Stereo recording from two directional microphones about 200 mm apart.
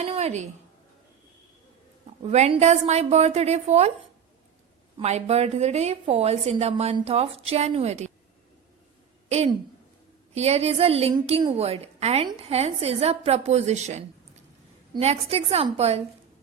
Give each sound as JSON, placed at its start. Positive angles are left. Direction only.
{"t": 0.0, "sound": "a sound", "side_deg": -30}
{"t": 2.2, "sound": "a woman's voice", "side_deg": -35}
{"t": 4.9, "sound": "a woman's voice", "side_deg": -35}
{"t": 9.3, "sound": "a woman's voice", "side_deg": -35}